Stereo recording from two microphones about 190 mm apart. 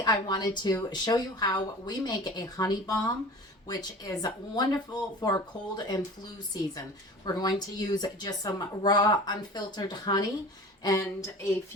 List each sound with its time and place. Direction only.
0.0 s speech: 20° left (ahead or behind)
7.3 s speech: 20° left (ahead or behind)